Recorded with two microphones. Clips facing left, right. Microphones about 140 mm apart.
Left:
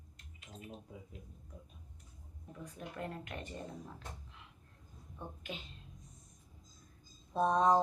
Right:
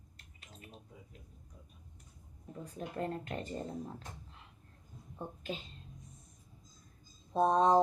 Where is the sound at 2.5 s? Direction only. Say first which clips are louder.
Right 5 dB; 35° right (ahead or behind).